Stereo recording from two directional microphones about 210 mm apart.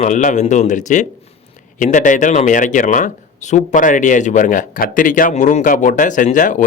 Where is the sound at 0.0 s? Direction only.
35° left (ahead or behind).